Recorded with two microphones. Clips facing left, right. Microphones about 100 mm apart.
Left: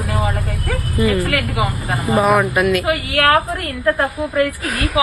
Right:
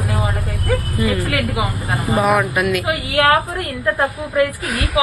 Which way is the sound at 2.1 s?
Centre (ahead or behind).